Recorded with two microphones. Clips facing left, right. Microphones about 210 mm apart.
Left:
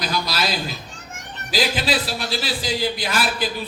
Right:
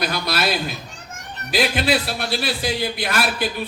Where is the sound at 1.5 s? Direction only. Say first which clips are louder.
Right 2 dB; 60° right (ahead or behind).